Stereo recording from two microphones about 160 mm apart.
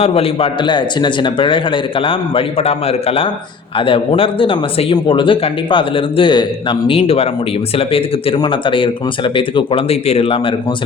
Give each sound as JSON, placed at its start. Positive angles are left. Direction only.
{"t": 0.0, "sound": "speech", "side_deg": 35}